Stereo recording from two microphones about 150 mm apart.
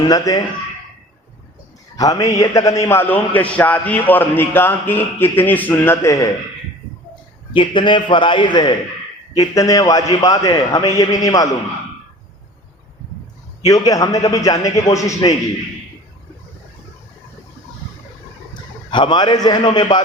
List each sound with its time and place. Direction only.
0.0 s a man's voice: 25° left (ahead or behind)
2.0 s a man's voice: 25° left (ahead or behind)
7.5 s a man's voice: 30° left (ahead or behind)
13.7 s a man's voice: 25° left (ahead or behind)
18.9 s a man's voice: 30° left (ahead or behind)